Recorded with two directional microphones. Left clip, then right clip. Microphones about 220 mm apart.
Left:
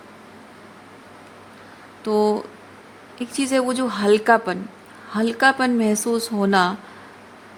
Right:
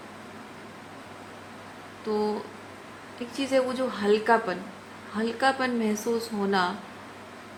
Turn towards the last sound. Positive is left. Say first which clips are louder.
# left 7 dB
turn(degrees=50)  # may be behind; listen again after turning